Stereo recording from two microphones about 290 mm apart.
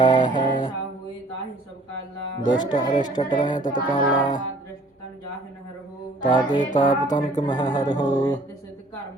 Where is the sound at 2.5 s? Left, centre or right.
Centre.